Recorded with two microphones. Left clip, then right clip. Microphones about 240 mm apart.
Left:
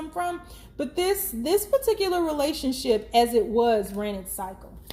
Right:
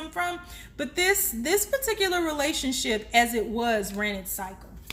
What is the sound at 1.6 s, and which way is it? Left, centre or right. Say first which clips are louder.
Speech: left 3 dB; right.